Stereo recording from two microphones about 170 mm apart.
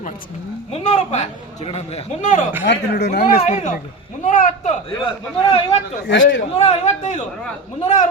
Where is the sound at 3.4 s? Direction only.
40° left (ahead or behind).